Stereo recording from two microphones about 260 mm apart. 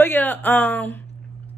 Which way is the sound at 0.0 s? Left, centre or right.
Centre.